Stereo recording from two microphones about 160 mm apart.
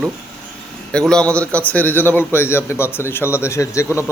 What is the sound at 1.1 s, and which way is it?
A man's voice, 5° left (ahead or behind).